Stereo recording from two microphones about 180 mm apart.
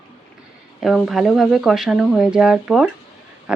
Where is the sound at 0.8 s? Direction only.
Centre (ahead or behind).